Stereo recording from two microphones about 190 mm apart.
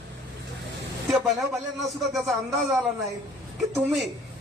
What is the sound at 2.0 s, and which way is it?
Speech, centre (ahead or behind).